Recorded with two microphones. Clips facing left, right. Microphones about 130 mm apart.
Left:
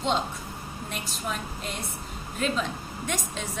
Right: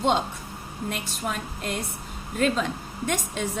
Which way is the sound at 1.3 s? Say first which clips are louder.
Right 3 dB; 65° right (ahead or behind).